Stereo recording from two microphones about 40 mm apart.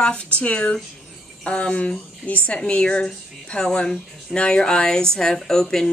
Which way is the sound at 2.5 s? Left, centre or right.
Left.